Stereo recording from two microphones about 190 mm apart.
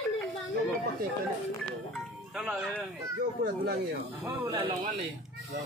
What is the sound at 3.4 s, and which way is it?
Speech, 50° right (ahead or behind).